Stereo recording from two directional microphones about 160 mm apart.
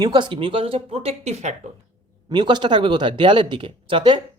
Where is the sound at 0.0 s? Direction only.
30° right (ahead or behind).